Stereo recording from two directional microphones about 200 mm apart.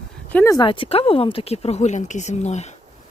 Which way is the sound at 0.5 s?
25° left (ahead or behind).